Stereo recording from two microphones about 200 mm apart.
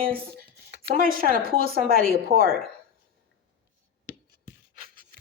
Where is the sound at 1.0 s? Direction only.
45° right (ahead or behind).